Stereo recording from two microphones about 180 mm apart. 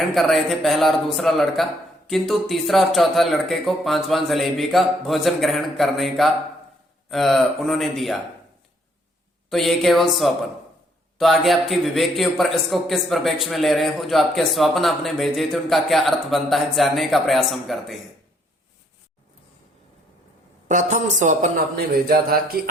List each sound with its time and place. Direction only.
0.1 s a man's voice: centre (ahead or behind)
9.5 s a man's voice: centre (ahead or behind)
20.7 s speech: 45° right (ahead or behind)